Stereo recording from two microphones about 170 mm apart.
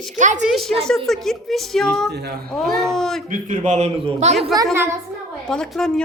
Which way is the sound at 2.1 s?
75° right (ahead or behind).